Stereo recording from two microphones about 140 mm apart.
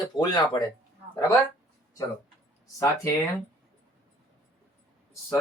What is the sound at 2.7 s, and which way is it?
Speech, 25° left (ahead or behind).